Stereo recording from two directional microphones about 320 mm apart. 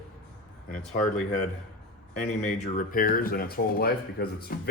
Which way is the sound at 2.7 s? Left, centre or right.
Left.